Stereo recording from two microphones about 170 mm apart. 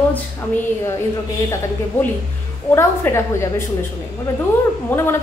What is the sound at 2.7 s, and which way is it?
Speech, 15° left (ahead or behind).